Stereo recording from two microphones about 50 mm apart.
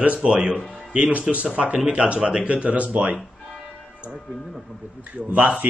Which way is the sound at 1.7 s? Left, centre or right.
Centre.